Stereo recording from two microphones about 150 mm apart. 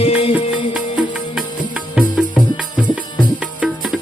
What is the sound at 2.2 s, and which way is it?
Music, 5° right (ahead or behind).